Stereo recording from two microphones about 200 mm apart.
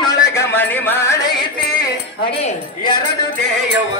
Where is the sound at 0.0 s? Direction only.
15° left (ahead or behind).